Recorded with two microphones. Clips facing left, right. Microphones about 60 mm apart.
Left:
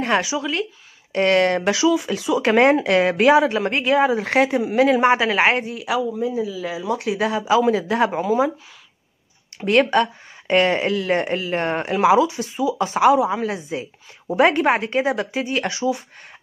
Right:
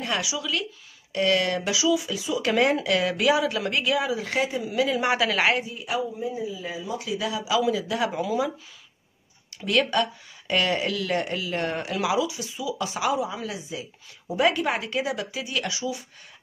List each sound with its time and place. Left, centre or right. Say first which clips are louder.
0.0 s speech: left 8 dB; left
5.0 s a man's voice: left 6 dB; left
6.4 s speech: left 6 dB; left
7.4 s speech: left 6 dB; left
9.6 s speech: left 6 dB; left
13.4 s speech: left 8 dB; left